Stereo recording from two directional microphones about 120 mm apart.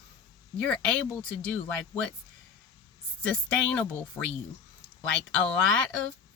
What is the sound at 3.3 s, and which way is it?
Speech, 10° left (ahead or behind).